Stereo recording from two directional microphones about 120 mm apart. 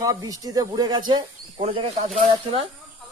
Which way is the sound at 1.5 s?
55° right (ahead or behind).